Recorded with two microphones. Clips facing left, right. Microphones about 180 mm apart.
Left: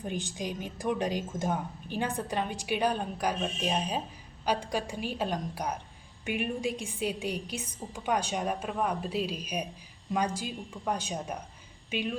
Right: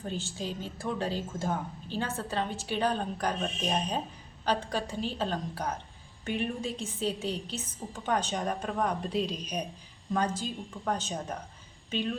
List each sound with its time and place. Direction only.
0.0 s a woman's voice: 15° left (ahead or behind)